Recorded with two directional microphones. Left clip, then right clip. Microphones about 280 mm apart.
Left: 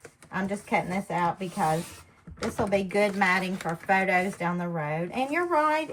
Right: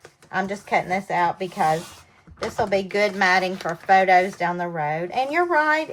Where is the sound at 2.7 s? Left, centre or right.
Right.